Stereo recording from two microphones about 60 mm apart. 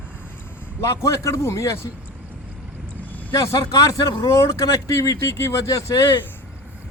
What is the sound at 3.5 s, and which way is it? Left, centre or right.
Speech, left.